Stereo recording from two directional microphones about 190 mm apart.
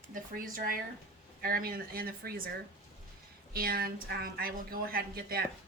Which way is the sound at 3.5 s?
50° right (ahead or behind).